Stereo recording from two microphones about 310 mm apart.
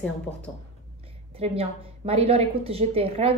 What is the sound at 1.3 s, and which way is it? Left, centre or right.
A woman's voice, centre.